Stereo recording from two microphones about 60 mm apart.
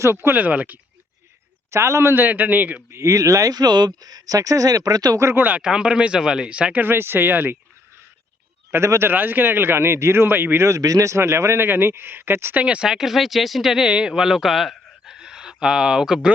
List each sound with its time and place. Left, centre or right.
0.0 s speech: right
1.7 s a man's voice: right
2.9 s speech: right
5.4 s speech: right
5.6 s speech: centre
6.8 s a man's voice: right
8.7 s a man's voice: right
10.7 s speech: right
12.5 s speech: centre
12.9 s speech: centre